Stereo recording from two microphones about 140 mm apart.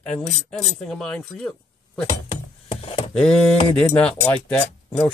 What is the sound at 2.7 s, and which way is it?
Chopping, 45° left (ahead or behind).